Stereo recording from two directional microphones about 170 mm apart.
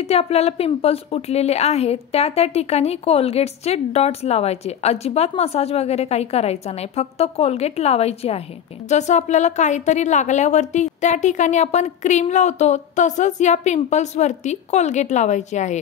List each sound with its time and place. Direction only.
0.0 s a woman's voice: 35° left (ahead or behind)